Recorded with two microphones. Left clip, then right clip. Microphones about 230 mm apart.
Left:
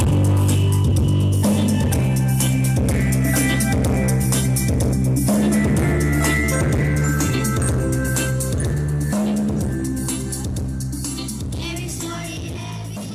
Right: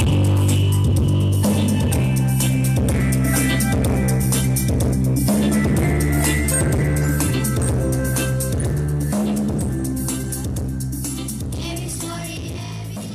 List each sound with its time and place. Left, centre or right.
0.0 s music: right